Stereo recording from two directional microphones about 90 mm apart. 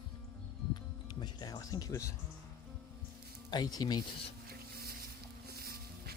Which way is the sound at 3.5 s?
50° left (ahead or behind).